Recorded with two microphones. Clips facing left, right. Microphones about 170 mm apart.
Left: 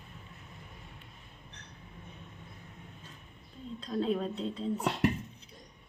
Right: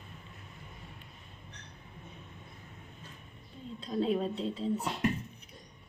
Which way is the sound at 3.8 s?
5° right (ahead or behind).